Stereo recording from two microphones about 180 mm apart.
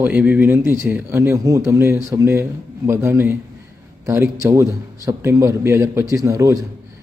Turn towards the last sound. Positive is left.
turn(degrees=-15)  # may be behind; listen again after turning